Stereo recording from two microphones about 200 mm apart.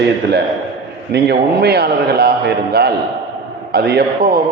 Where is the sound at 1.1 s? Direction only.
50° right (ahead or behind).